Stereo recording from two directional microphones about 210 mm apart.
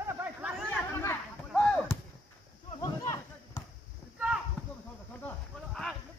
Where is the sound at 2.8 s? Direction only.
15° left (ahead or behind).